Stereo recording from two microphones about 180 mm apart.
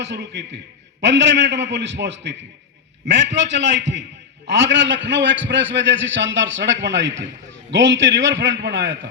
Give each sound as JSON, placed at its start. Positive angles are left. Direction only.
{"t": 0.0, "sound": "a man's voice", "side_deg": -75}
{"t": 4.4, "sound": "a man's voice", "side_deg": -75}